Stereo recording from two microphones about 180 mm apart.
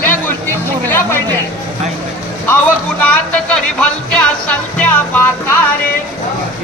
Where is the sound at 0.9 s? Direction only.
10° left (ahead or behind).